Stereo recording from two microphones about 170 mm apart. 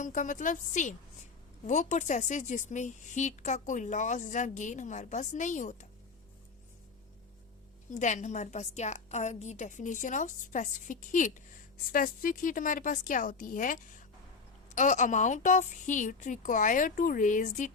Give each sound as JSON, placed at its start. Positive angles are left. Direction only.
{"t": 0.0, "sound": "a woman's voice", "side_deg": 50}
{"t": 7.9, "sound": "a woman's voice", "side_deg": 45}